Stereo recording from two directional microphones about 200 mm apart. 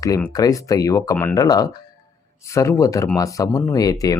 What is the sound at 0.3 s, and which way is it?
Speech, 15° left (ahead or behind).